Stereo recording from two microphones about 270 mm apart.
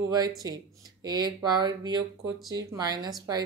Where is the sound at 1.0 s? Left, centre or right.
Centre.